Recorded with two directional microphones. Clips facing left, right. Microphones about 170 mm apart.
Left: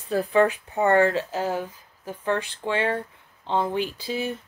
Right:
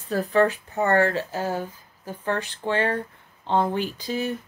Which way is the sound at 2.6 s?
40° right (ahead or behind).